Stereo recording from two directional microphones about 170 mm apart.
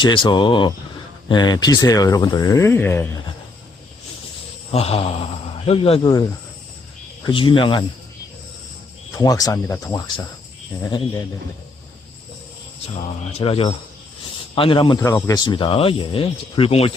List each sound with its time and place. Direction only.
0.0 s speech: 25° left (ahead or behind)
4.7 s speech: 35° left (ahead or behind)
7.3 s speech: 30° left (ahead or behind)
9.1 s speech: 20° left (ahead or behind)
10.8 s speech: 20° left (ahead or behind)
13.3 s speech: 35° left (ahead or behind)